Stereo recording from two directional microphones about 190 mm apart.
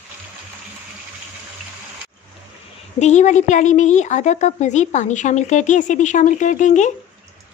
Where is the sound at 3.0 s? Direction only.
40° left (ahead or behind).